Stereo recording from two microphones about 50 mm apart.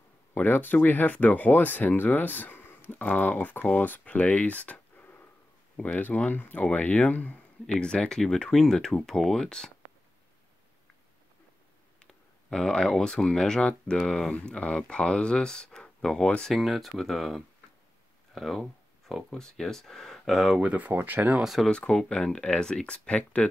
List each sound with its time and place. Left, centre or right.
0.3 s speech: left
4.6 s a sound: left
5.8 s speech: left
7.6 s speech: centre
12.4 s speech: centre
16.5 s speech: centre
18.3 s a sound: centre
19.3 s speech: centre
20.6 s speech: right
21.6 s speech: centre